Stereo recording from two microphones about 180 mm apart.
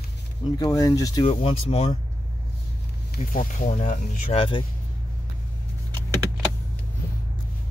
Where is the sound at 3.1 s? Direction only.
50° left (ahead or behind).